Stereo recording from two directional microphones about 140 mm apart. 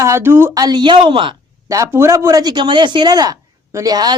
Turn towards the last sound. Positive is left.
turn(degrees=-30)  # may be behind; listen again after turning